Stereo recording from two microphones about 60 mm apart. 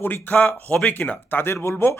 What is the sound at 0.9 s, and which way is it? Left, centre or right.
Speech, left.